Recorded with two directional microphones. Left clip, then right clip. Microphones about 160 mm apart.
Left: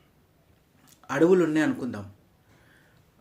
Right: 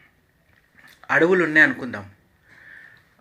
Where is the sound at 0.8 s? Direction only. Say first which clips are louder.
Right 4 dB; 40° left (ahead or behind).